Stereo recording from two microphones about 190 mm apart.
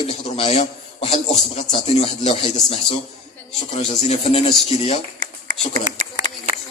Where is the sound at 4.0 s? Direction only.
35° left (ahead or behind).